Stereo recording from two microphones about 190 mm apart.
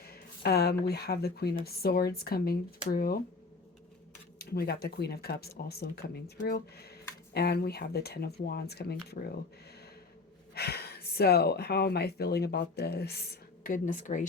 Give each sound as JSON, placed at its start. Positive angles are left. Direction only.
{"t": 0.0, "sound": "speech", "side_deg": 55}
{"t": 4.4, "sound": "speech", "side_deg": 55}
{"t": 10.5, "sound": "speech", "side_deg": 55}